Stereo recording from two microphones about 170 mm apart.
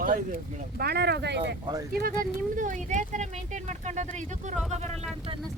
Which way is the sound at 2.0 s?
50° right (ahead or behind).